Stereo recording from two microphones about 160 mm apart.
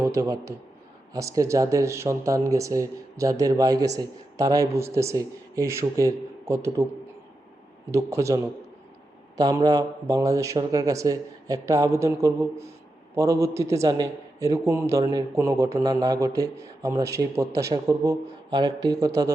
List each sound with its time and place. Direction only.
0.0 s speech: 20° right (ahead or behind)
7.9 s speech: 20° right (ahead or behind)